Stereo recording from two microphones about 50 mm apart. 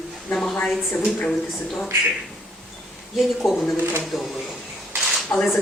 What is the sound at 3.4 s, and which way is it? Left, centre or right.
Speech, left.